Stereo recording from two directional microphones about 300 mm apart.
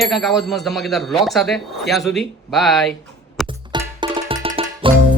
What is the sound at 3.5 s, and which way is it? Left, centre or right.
Music, centre.